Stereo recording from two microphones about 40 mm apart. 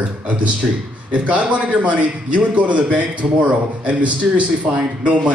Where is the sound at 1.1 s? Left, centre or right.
Right.